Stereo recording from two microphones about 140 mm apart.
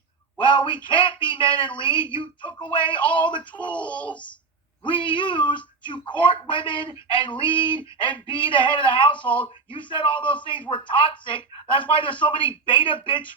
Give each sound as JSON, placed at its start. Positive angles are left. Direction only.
{"t": 0.4, "sound": "speech", "side_deg": 35}
{"t": 3.5, "sound": "speech", "side_deg": 10}
{"t": 4.8, "sound": "speech", "side_deg": 35}